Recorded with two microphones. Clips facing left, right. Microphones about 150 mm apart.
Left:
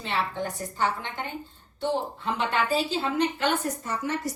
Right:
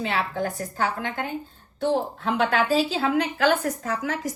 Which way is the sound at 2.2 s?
90° right.